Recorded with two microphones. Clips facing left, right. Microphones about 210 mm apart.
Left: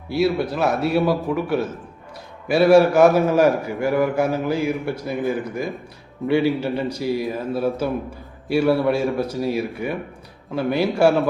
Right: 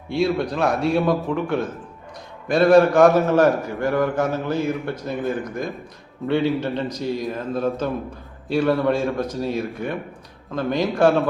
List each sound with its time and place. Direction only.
0.1 s a man's voice: 5° left (ahead or behind)